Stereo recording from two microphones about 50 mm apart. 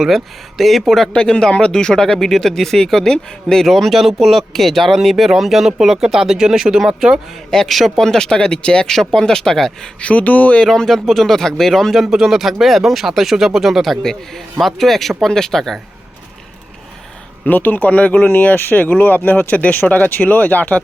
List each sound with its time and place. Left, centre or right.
0.0 s speech: centre
1.1 s speech: centre
3.7 s speech: centre
7.5 s speech: centre
8.9 s speech: centre
10.0 s speech: left
10.7 s speech: centre
11.9 s speech: centre
14.0 s speech: centre
17.4 s speech: left